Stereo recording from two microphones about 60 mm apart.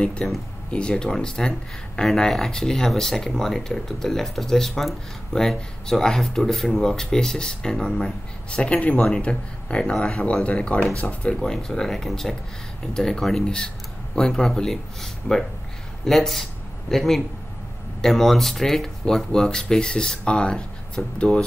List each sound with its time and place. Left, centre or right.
0.0 s speech: centre
9.0 s speech: centre
11.1 s speech: centre